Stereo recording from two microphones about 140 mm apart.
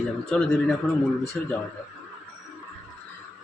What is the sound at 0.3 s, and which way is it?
A man's voice, 5° left (ahead or behind).